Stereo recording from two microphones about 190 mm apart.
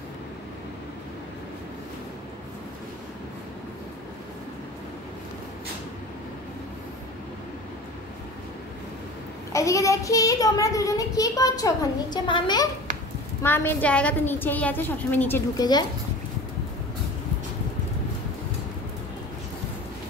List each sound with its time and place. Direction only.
9.5 s a child's voice: 15° left (ahead or behind)
13.4 s a child's voice: 10° left (ahead or behind)